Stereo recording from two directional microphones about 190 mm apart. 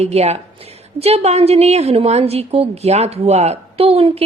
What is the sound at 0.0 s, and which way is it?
A woman's voice, 35° right (ahead or behind).